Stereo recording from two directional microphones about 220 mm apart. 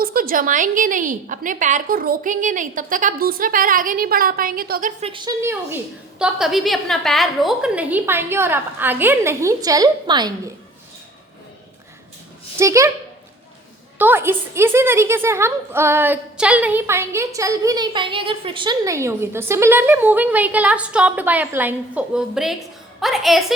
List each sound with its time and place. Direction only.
0.0 s a woman's voice: 40° right (ahead or behind); by 10.5 s 20° right (ahead or behind)
12.5 s a woman's voice: 15° right (ahead or behind)
14.0 s a woman's voice: 10° right (ahead or behind)